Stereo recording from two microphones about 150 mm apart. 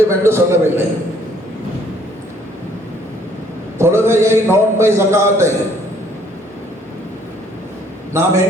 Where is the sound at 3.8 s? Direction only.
15° right (ahead or behind).